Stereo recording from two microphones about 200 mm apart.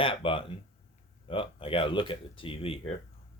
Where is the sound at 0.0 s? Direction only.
25° left (ahead or behind).